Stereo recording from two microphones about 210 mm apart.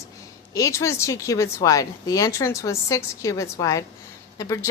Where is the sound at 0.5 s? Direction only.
15° left (ahead or behind).